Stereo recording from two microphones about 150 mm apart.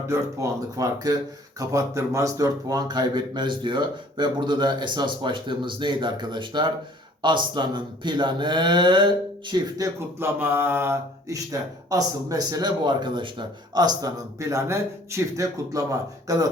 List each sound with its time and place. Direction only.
0.1 s speech: 20° right (ahead or behind)